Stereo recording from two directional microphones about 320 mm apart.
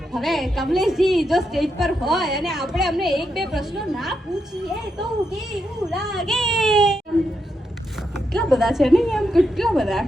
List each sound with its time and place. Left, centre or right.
0.1 s a woman's voice: centre
5.5 s a woman's voice: centre
8.3 s a woman's voice: centre